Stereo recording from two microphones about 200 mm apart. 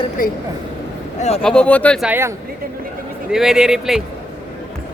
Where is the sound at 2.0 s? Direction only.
10° right (ahead or behind).